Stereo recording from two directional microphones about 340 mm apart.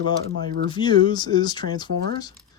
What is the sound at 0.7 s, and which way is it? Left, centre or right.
Speech, centre.